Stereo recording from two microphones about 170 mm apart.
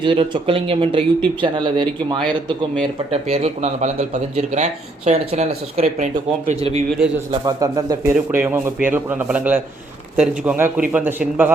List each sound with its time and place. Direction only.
0.0 s speech: 30° right (ahead or behind)
7.3 s a man's voice: 20° right (ahead or behind)